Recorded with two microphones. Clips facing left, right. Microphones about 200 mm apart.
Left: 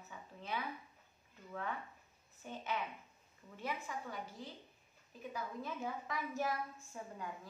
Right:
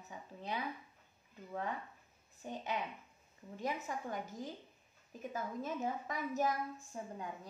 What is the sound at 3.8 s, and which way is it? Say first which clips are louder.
A woman's voice: right 4 dB; 45° right (ahead or behind).